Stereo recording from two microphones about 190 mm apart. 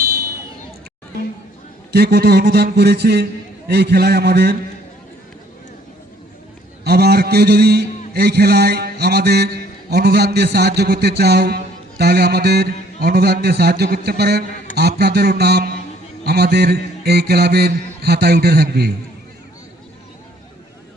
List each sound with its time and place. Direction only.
1.9 s a man's voice: 60° right (ahead or behind)
6.8 s a man's voice: 55° right (ahead or behind)